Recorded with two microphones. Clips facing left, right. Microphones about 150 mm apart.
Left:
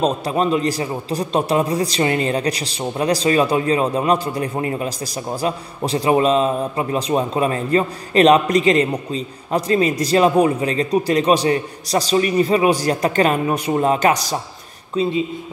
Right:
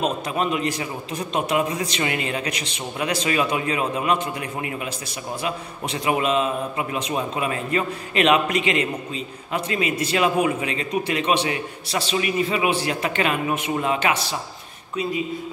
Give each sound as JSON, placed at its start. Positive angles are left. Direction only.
{"t": 0.0, "sound": "a man's voice", "side_deg": 35}
{"t": 15.0, "sound": "speech", "side_deg": 25}